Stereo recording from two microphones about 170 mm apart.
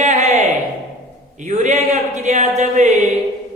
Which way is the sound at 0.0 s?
45° right (ahead or behind).